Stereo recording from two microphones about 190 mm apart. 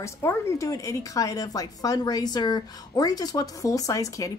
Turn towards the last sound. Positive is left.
turn(degrees=15)  # may be behind; listen again after turning